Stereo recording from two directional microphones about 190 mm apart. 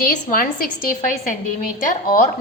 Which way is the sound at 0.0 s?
45° left (ahead or behind).